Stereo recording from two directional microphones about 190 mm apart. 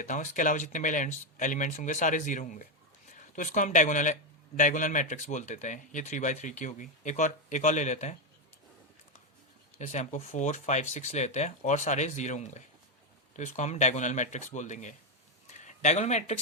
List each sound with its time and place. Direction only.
0.0 s speech: 40° left (ahead or behind)
9.7 s speech: 40° left (ahead or behind)